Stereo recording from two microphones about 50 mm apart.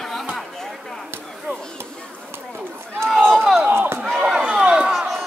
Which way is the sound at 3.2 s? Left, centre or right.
Right.